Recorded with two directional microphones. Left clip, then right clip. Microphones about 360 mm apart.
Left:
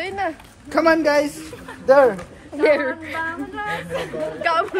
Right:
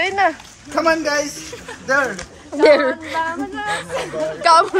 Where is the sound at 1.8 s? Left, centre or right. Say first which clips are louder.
Left 5 dB; left.